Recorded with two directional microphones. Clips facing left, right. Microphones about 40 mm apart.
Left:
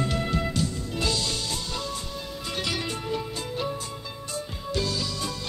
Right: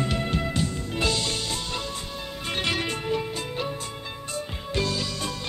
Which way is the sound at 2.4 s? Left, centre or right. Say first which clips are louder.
Right 3 dB; right.